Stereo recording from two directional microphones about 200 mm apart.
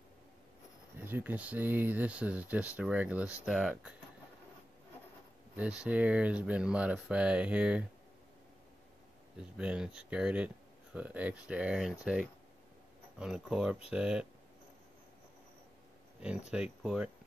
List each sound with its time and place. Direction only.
0.9 s speech: 10° right (ahead or behind)
5.6 s speech: 5° right (ahead or behind)
9.6 s speech: 5° right (ahead or behind)
16.2 s speech: 5° right (ahead or behind)